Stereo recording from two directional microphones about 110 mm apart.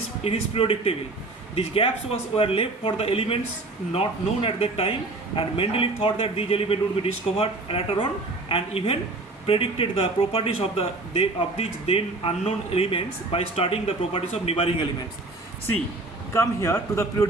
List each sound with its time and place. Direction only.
0.3 s a man's voice: 60° left (ahead or behind)
16.3 s a man's voice: 25° left (ahead or behind)